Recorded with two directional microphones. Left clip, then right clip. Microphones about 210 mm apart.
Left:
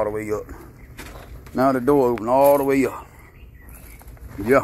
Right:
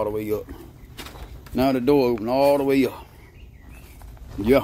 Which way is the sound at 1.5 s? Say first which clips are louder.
Left 2 dB; 10° right (ahead or behind).